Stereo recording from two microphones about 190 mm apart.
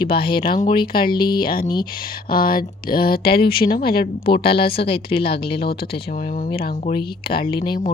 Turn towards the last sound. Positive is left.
turn(degrees=25)  # may be behind; listen again after turning